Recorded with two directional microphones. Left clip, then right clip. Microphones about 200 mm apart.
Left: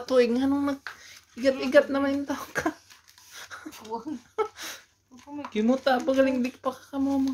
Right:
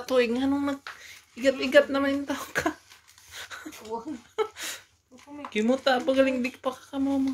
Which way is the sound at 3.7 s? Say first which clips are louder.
Left 1 dB; 50° left (ahead or behind).